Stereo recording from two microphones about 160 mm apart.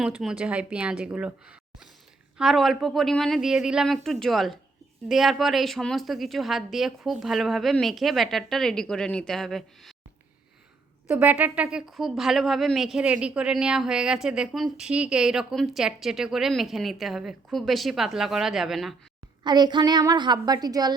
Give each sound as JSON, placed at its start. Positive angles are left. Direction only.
{"t": 0.0, "sound": "a woman's voice", "side_deg": -5}
{"t": 11.1, "sound": "a woman's voice", "side_deg": -10}
{"t": 19.5, "sound": "a woman's voice", "side_deg": -25}